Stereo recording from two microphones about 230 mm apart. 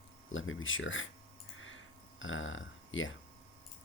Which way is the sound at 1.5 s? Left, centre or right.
Left.